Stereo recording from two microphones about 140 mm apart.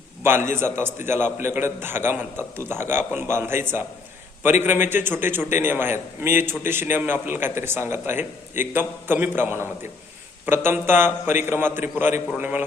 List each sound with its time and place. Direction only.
0.2 s a man's voice: 15° right (ahead or behind)